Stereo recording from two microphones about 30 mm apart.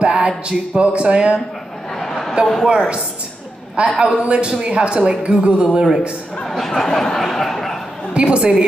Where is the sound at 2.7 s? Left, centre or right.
Right.